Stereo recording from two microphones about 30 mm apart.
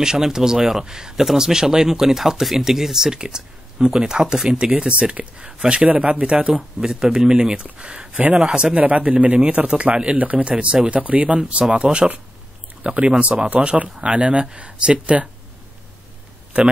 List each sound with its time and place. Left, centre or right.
0.0 s speech: right
5.9 s speech: right
6.5 s speech: centre
7.6 s speech: right
8.7 s a man's voice: right
10.1 s a man's voice: right
11.3 s a man's voice: right
16.5 s a man's voice: right